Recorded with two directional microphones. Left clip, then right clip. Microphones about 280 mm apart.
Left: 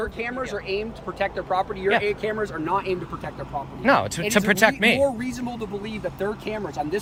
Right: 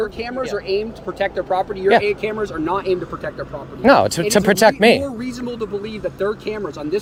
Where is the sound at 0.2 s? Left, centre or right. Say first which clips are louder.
Right 5 dB; right.